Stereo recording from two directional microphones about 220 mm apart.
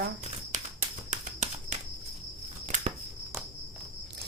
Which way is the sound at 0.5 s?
35° right (ahead or behind).